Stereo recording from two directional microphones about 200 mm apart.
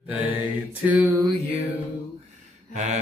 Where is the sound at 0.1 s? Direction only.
10° right (ahead or behind).